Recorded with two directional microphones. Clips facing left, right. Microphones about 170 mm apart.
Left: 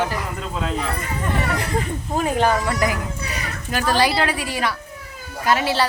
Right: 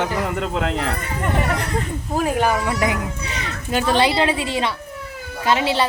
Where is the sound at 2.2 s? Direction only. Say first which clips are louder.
Even; 5° right (ahead or behind).